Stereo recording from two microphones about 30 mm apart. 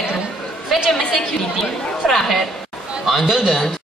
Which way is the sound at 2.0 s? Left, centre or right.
Centre.